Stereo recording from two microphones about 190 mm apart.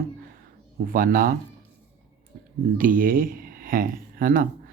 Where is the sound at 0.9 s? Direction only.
50° right (ahead or behind).